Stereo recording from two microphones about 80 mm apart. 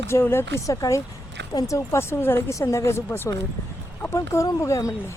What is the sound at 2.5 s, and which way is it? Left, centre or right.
Speech, left.